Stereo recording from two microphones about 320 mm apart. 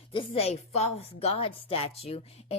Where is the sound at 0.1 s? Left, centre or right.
Centre.